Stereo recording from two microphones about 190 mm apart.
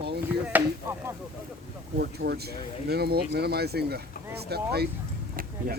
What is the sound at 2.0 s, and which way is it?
Speech, 55° right (ahead or behind).